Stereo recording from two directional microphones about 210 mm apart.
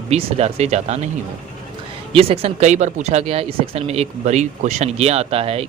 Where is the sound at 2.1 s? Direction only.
25° right (ahead or behind).